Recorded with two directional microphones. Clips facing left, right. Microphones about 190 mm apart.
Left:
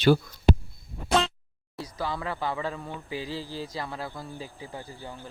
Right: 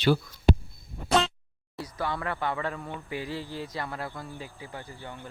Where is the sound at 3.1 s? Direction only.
30° left (ahead or behind).